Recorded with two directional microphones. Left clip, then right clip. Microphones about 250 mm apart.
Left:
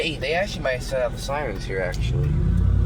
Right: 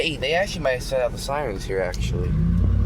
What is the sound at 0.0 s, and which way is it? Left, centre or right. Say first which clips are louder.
Speech: right 2 dB; right.